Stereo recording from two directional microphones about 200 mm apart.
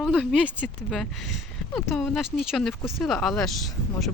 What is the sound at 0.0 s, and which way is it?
Speech, centre (ahead or behind).